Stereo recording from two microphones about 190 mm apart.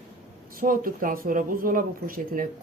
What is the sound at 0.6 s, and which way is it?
Speech, 50° right (ahead or behind).